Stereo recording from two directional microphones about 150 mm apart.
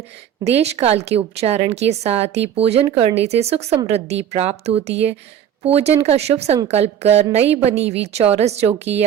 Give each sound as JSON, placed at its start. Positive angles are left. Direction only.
{"t": 0.4, "sound": "speech", "side_deg": -45}